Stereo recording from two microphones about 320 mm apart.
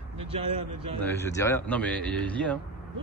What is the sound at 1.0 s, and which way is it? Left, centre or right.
Speech, centre.